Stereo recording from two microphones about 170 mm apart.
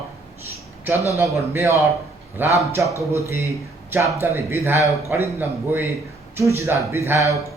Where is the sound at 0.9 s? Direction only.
20° left (ahead or behind).